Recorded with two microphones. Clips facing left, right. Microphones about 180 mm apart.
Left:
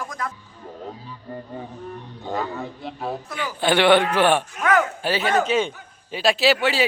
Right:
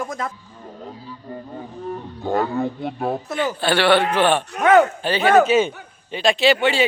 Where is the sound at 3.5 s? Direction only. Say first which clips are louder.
Left 2 dB; 15° left (ahead or behind).